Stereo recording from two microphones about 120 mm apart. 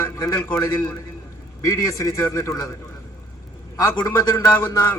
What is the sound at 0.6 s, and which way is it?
A man's voice, 25° left (ahead or behind).